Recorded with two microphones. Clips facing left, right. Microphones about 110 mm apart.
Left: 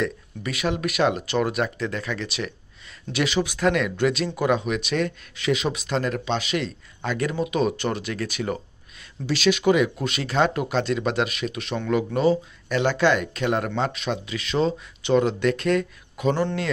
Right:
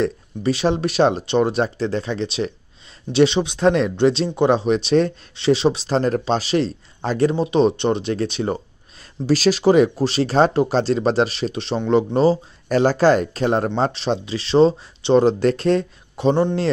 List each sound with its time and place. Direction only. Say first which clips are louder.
0.0 s speech: right 7 dB; 30° right (ahead or behind)